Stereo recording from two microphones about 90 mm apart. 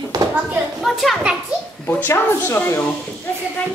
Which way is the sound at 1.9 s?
25° left (ahead or behind).